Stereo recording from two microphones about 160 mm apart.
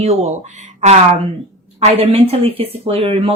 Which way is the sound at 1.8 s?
40° right (ahead or behind).